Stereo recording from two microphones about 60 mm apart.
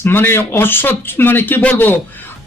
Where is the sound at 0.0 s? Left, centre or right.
Left.